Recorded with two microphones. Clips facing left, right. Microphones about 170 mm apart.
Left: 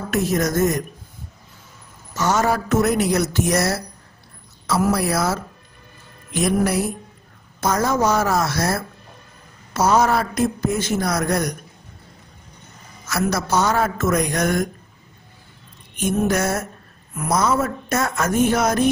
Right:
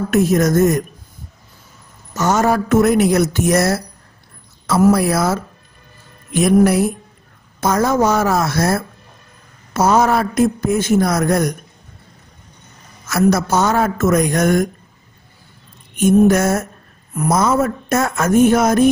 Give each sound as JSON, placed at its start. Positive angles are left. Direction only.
{"t": 0.1, "sound": "a man's voice", "side_deg": -50}
{"t": 2.1, "sound": "a man's voice", "side_deg": -50}
{"t": 6.4, "sound": "a man's voice", "side_deg": -55}
{"t": 13.1, "sound": "a man's voice", "side_deg": -50}
{"t": 16.0, "sound": "a man's voice", "side_deg": -50}